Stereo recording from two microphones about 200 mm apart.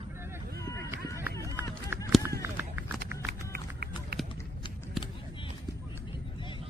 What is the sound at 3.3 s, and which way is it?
Music, 50° right (ahead or behind).